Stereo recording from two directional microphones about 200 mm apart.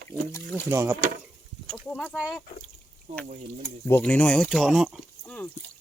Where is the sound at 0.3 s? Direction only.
15° left (ahead or behind).